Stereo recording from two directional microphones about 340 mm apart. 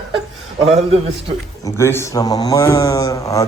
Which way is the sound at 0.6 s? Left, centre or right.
Centre.